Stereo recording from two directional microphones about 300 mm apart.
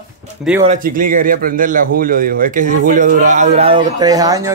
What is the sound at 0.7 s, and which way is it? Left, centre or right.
A man's voice, right.